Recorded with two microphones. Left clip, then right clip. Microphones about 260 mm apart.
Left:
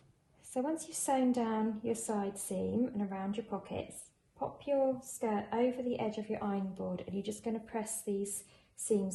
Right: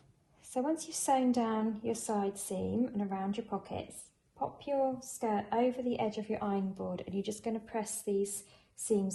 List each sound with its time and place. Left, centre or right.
0.5 s a woman's voice: centre